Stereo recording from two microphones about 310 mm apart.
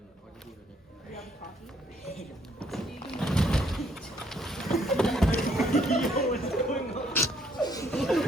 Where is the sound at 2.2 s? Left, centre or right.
Centre.